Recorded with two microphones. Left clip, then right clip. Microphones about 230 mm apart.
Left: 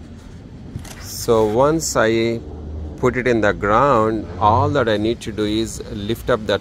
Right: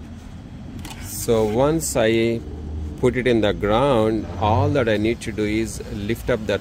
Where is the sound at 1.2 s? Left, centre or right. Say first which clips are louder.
Left 4 dB; centre.